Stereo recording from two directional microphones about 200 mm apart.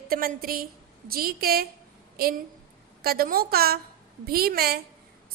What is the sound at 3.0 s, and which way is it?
A woman's voice, 50° right (ahead or behind).